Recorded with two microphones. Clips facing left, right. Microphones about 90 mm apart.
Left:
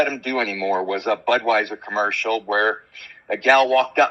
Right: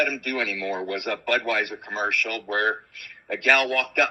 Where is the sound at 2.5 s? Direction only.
70° left (ahead or behind).